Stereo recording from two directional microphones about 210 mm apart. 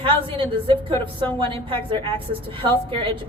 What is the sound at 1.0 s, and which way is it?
A woman's voice, 25° right (ahead or behind).